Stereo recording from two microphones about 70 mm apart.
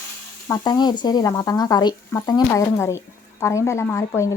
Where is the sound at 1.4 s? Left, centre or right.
Left.